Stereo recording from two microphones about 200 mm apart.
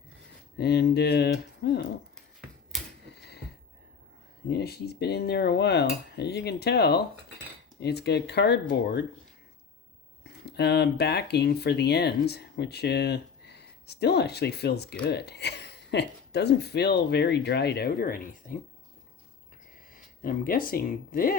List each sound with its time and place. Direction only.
0.6 s speech: 55° left (ahead or behind)
2.7 s typewriter: centre (ahead or behind)
3.2 s a sound: 55° left (ahead or behind)
4.4 s speech: 55° left (ahead or behind)
10.4 s speech: 55° left (ahead or behind)
19.9 s speech: 45° left (ahead or behind)